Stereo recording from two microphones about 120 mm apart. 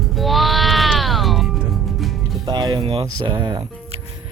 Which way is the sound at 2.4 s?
35° right (ahead or behind).